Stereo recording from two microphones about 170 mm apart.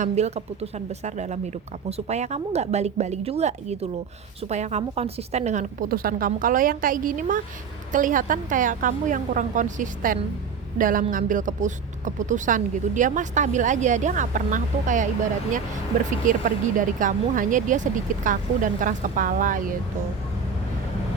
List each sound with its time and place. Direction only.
0.0 s a woman's voice: 40° right (ahead or behind)
16.2 s speech: 50° right (ahead or behind)